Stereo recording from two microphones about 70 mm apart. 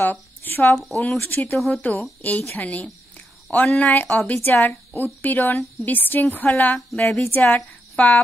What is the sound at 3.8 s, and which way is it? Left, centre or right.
A woman's voice, left.